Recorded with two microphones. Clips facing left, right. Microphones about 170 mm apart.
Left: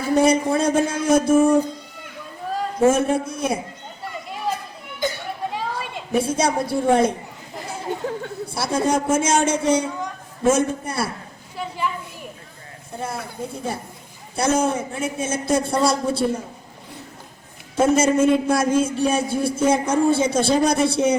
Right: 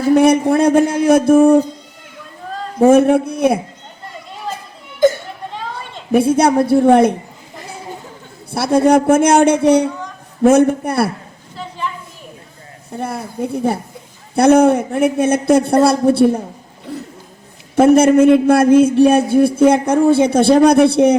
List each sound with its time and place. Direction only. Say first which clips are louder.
0.1 s a man's voice: right 6 dB; 65° right (ahead or behind)
2.9 s a man's voice: right 10 dB; 60° right (ahead or behind)
4.9 s children playing: right 13 dB; 50° right (ahead or behind)
5.5 s a sound: right 1 dB; 10° left (ahead or behind)
6.1 s a man's voice: right 8 dB; 60° right (ahead or behind)
8.5 s a man's voice: right 9 dB; 60° right (ahead or behind)
13.0 s a man's voice: right 7 dB; 60° right (ahead or behind)
17.7 s a man's voice: right 8 dB; 60° right (ahead or behind)